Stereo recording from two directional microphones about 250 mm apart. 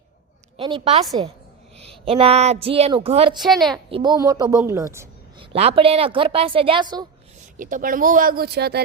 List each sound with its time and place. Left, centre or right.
0.5 s speech: right
3.3 s a woman's voice: centre
3.8 s a woman's voice: centre
5.5 s speech: right
7.5 s speech: right